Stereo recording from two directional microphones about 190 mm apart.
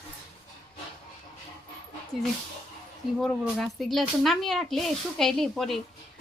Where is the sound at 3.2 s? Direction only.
5° left (ahead or behind).